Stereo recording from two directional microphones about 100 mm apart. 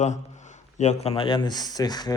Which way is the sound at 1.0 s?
65° left (ahead or behind).